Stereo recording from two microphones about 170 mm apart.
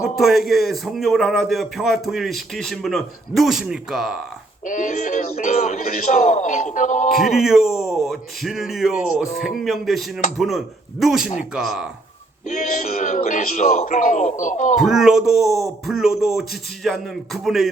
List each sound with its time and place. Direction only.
0.0 s a man's voice: centre (ahead or behind)
4.6 s speech: 50° left (ahead or behind)
7.1 s a man's voice: centre (ahead or behind)
13.0 s speech: 50° left (ahead or behind)
14.8 s a man's voice: 5° right (ahead or behind)